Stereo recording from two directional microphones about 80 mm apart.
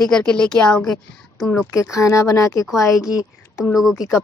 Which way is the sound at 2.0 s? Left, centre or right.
Left.